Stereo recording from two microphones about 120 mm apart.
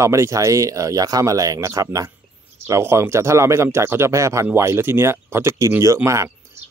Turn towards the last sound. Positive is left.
turn(degrees=-25)  # may be behind; listen again after turning